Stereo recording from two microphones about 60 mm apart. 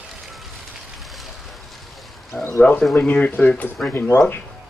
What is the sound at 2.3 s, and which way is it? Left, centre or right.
Speech, centre.